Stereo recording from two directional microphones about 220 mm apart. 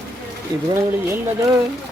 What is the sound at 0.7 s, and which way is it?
Speech, 10° right (ahead or behind).